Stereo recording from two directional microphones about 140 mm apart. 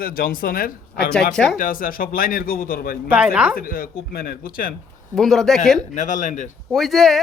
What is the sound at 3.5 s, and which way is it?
Speech, 90° left.